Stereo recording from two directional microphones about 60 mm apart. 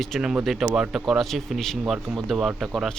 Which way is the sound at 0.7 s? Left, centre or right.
Centre.